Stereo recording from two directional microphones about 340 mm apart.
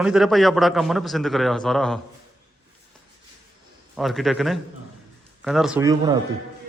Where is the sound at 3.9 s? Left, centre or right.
Centre.